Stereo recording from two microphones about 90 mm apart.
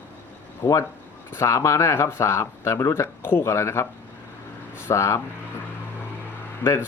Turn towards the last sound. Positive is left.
turn(degrees=25)  # may be behind; listen again after turning